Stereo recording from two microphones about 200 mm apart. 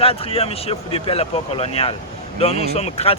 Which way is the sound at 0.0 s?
30° left (ahead or behind).